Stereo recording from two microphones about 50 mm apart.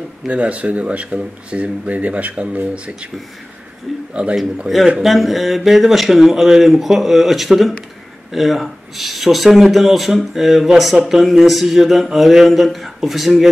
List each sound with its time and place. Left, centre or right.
0.3 s speech: right
4.1 s a man's voice: right
4.8 s speech: centre